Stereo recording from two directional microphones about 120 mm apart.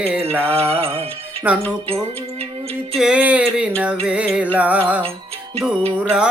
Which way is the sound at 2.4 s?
55° right (ahead or behind).